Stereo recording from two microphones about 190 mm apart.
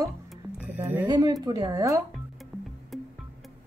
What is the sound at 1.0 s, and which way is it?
Speech, 20° right (ahead or behind).